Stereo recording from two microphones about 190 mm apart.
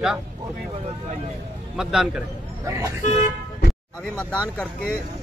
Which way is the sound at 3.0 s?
40° left (ahead or behind).